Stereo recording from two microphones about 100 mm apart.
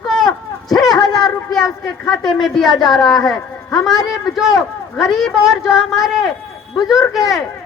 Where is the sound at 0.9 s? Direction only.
45° left (ahead or behind).